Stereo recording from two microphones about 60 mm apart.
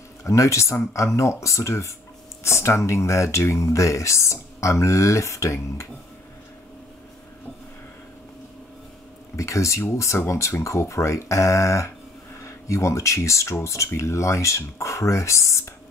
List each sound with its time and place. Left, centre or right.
0.2 s speech: left
9.4 s speech: left